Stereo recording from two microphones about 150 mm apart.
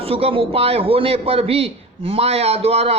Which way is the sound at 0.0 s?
40° right (ahead or behind).